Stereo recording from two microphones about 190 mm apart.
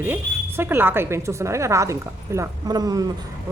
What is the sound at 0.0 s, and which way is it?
A woman's voice, 10° right (ahead or behind).